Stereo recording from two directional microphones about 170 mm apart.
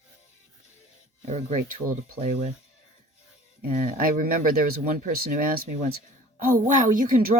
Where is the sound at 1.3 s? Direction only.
40° right (ahead or behind).